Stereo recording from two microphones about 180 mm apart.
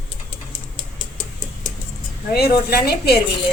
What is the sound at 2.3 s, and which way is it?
Speech, 60° left (ahead or behind).